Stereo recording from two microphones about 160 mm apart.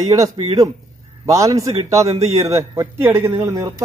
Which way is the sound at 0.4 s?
35° right (ahead or behind).